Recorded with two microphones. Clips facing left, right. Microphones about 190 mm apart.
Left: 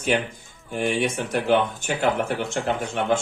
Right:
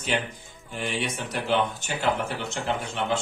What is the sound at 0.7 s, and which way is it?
Speech, 50° left (ahead or behind).